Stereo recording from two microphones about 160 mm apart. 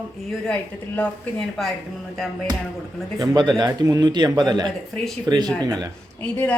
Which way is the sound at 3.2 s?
25° right (ahead or behind).